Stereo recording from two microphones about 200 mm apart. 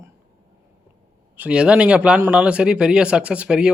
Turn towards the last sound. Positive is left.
turn(degrees=-5)  # may be behind; listen again after turning